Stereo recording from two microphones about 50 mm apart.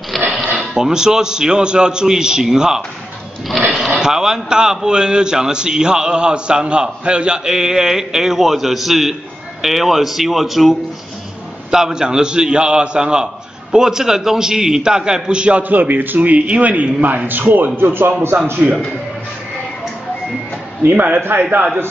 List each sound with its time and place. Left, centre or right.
0.1 s a sound: centre
0.6 s a man's voice: centre
11.7 s a man's voice: centre
15.7 s a man's voice: right
20.8 s a man's voice: right